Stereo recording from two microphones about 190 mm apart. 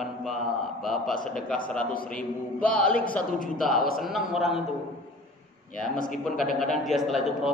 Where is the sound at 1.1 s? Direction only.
45° left (ahead or behind).